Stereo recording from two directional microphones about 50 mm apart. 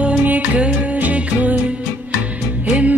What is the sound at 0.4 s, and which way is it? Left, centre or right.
Music, right.